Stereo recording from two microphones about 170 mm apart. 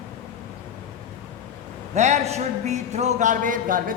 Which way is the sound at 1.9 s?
40° right (ahead or behind).